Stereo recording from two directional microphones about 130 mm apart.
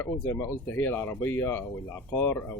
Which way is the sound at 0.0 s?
15° left (ahead or behind).